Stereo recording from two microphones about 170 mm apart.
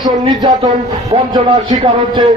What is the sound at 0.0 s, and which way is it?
A man's voice, 25° right (ahead or behind).